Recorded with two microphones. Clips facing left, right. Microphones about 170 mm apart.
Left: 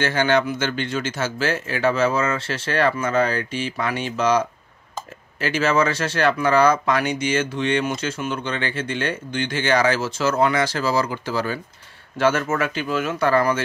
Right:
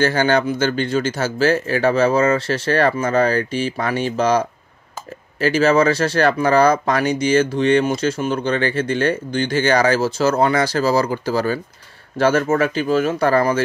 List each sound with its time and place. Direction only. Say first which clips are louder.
0.0 s speech: right 3 dB; 40° right (ahead or behind)